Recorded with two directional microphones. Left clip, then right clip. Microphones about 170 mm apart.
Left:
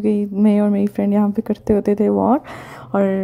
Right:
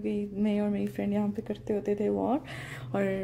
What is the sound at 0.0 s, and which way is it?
Speech, 45° left (ahead or behind).